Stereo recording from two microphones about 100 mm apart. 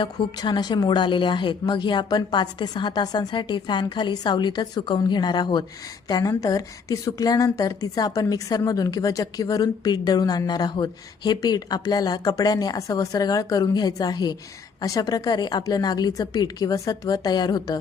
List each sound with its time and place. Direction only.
0.3 s a woman's voice: 45° left (ahead or behind)